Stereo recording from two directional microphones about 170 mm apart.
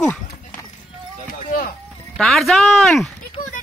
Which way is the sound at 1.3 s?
55° left (ahead or behind).